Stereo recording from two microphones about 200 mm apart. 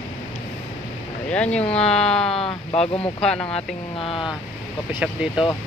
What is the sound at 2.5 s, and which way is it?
Speech, 30° left (ahead or behind).